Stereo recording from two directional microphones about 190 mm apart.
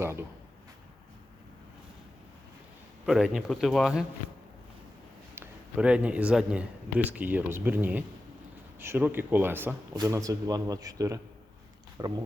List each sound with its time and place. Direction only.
0.0 s speech: 15° right (ahead or behind)
3.1 s speech: 5° right (ahead or behind)
5.3 s a man's voice: 10° right (ahead or behind)